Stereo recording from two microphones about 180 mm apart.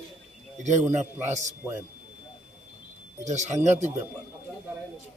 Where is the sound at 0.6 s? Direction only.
40° right (ahead or behind).